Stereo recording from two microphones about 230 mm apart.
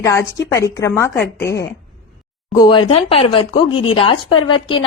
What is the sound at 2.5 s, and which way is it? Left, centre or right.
Speech, centre.